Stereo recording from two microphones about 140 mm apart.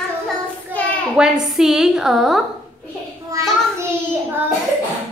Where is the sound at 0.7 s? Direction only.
15° right (ahead or behind).